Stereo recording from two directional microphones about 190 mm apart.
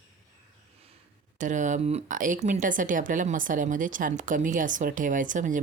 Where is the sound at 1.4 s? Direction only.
40° right (ahead or behind).